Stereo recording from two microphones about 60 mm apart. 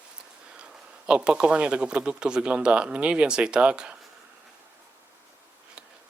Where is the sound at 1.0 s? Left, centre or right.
Centre.